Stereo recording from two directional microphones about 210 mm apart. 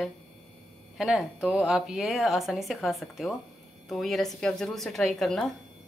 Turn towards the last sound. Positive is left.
turn(degrees=0)  # may be behind; listen again after turning